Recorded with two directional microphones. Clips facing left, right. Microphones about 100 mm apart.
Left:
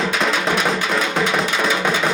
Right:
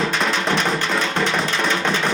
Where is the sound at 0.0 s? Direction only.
Centre (ahead or behind).